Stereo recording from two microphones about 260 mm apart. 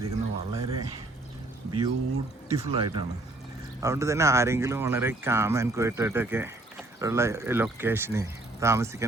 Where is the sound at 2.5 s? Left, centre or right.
Centre.